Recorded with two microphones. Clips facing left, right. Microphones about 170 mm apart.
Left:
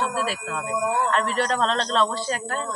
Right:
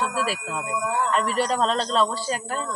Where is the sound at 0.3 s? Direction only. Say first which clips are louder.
Even; 10° right (ahead or behind).